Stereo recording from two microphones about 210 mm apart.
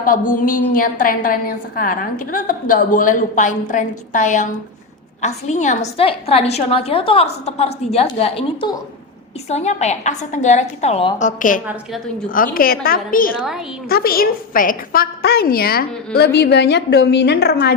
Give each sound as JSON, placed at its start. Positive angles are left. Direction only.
{"t": 0.0, "sound": "a woman's voice", "side_deg": 40}
{"t": 13.3, "sound": "a woman's voice", "side_deg": 0}
{"t": 13.8, "sound": "a woman's voice", "side_deg": 45}